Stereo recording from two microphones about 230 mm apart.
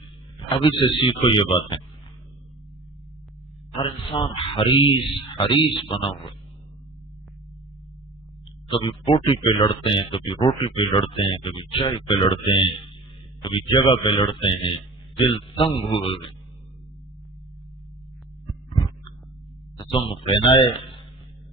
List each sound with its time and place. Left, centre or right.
0.3 s speech: left
3.8 s speech: left
8.7 s speech: left
19.7 s speech: centre